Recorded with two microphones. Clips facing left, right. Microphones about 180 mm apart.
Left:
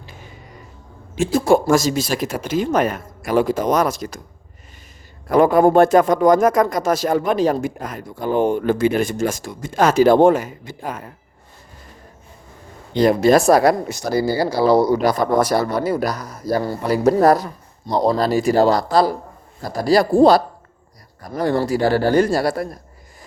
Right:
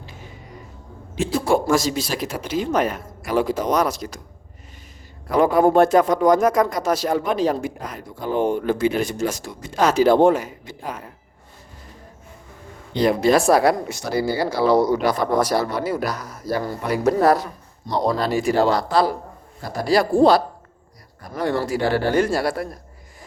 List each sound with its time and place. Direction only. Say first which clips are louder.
1.2 s speech: left 4 dB; 45° left (ahead or behind)
5.4 s speech: left 3 dB; 50° left (ahead or behind)
12.9 s speech: left 3 dB; 45° left (ahead or behind)